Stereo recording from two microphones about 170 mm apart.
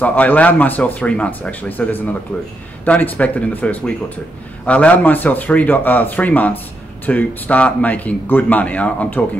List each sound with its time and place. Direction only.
0.0 s speech: 10° left (ahead or behind)